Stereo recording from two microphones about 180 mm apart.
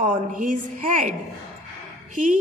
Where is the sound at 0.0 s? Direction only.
45° right (ahead or behind).